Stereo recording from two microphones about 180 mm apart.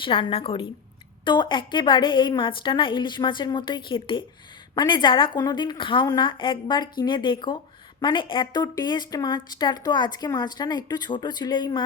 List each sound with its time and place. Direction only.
0.0 s speech: 30° left (ahead or behind)